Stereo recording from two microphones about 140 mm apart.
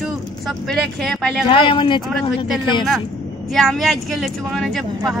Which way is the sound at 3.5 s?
Centre (ahead or behind).